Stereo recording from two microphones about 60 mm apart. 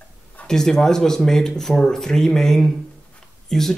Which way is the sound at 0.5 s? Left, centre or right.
Centre.